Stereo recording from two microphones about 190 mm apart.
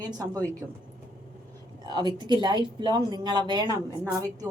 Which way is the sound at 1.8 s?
20° right (ahead or behind).